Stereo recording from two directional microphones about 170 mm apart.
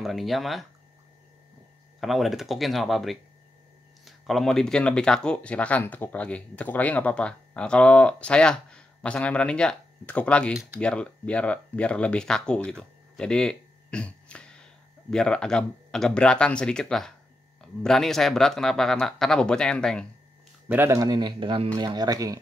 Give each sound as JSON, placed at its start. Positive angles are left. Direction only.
{"t": 0.0, "sound": "speech", "side_deg": 0}
{"t": 2.0, "sound": "speech", "side_deg": 0}
{"t": 13.1, "sound": "a sound", "side_deg": 5}
{"t": 15.0, "sound": "speech", "side_deg": 5}
{"t": 20.6, "sound": "speech", "side_deg": -15}